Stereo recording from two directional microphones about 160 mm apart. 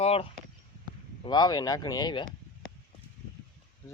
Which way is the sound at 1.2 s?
25° left (ahead or behind).